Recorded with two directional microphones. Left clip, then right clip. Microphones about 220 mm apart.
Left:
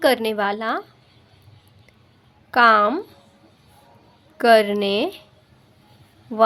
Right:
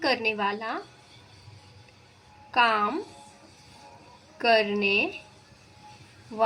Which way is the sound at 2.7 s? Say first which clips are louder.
Left 9 dB; 60° left (ahead or behind).